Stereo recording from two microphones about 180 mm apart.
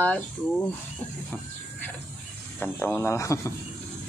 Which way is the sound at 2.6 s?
10° left (ahead or behind).